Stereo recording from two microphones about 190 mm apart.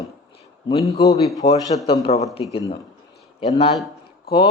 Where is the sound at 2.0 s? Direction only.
35° left (ahead or behind).